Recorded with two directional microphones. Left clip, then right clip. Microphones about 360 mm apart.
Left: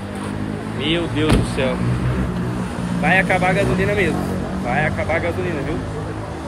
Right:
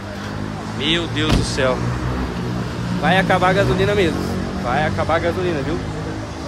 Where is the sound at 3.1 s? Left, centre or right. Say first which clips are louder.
Right 1 dB; centre.